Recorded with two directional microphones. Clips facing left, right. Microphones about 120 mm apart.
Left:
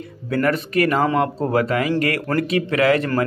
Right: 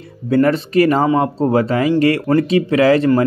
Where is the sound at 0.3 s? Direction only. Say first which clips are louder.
Right 6 dB; 30° right (ahead or behind).